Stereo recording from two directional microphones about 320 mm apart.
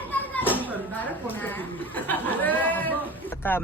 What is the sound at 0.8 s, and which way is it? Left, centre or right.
A woman's voice, centre.